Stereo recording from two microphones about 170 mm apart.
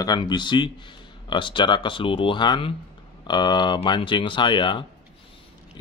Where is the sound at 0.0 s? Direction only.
25° left (ahead or behind).